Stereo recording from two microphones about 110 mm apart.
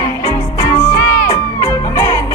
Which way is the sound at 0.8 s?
25° left (ahead or behind).